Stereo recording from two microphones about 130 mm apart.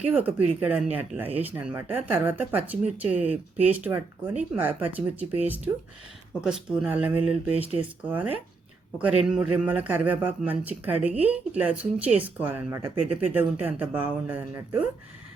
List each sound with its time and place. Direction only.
0.0 s speech: 10° right (ahead or behind)
7.5 s speech: 50° right (ahead or behind)
7.8 s speech: 15° right (ahead or behind)